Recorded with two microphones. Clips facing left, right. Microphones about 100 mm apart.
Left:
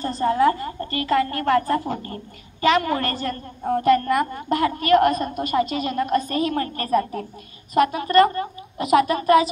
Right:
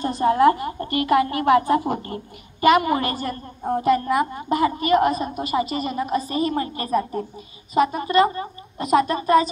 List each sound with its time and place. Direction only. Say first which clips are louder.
0.0 s a woman's voice: right 2 dB; 15° right (ahead or behind)
6.6 s a woman's voice: left 1 dB; 15° right (ahead or behind)
8.7 s a woman's voice: left 1 dB; 5° left (ahead or behind)